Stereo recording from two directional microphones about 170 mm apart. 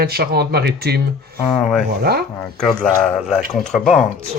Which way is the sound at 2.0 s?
65° right (ahead or behind).